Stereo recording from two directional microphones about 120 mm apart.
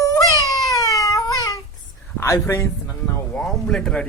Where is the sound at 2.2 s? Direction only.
25° left (ahead or behind).